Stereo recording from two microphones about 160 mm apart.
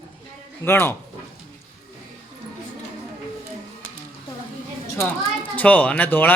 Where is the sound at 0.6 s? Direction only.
15° left (ahead or behind).